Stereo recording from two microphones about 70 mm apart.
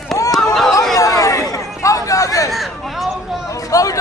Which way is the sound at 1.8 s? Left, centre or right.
Left.